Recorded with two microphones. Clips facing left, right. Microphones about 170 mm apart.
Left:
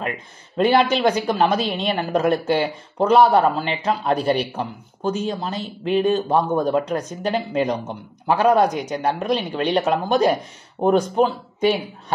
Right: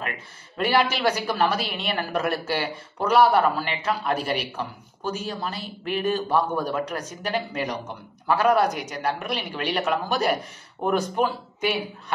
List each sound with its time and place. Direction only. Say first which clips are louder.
0.7 s a man's voice: left 5 dB; 30° left (ahead or behind)